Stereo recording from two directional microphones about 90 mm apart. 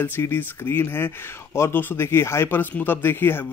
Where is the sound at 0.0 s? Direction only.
25° left (ahead or behind).